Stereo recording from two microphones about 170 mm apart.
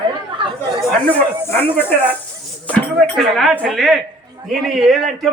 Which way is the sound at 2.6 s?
5° left (ahead or behind).